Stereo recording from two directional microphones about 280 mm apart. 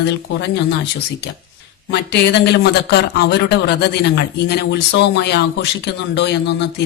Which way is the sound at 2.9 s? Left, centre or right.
Left.